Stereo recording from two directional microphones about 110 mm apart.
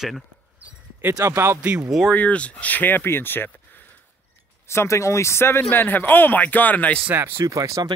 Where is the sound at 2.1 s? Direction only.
10° left (ahead or behind).